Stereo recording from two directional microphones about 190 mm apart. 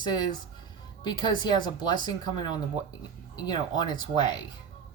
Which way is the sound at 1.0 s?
20° left (ahead or behind).